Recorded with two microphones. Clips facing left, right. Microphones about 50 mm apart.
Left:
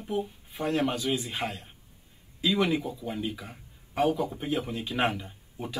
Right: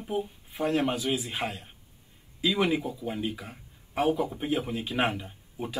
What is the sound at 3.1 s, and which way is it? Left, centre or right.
Speech, centre.